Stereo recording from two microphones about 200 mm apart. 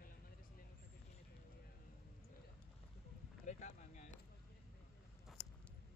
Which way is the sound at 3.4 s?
35° left (ahead or behind).